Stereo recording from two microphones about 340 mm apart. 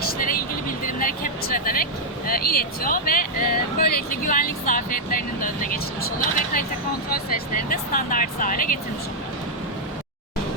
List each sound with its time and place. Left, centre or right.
0.0 s vehicle: left
0.9 s speech: left